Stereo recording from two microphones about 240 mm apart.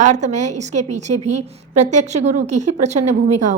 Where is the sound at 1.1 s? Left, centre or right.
Right.